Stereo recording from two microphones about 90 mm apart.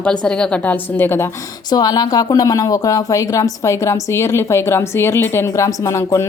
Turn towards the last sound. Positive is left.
turn(degrees=35)  # may be behind; listen again after turning